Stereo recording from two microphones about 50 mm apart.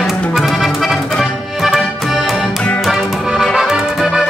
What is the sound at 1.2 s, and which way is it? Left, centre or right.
Accordion, centre.